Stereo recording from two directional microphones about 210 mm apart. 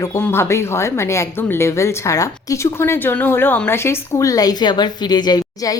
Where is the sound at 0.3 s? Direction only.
10° left (ahead or behind).